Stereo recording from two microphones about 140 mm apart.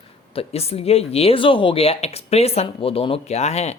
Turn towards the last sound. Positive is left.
turn(degrees=50)  # may be behind; listen again after turning